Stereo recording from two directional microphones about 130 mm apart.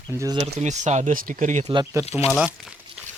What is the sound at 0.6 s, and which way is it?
Speech, 65° right (ahead or behind).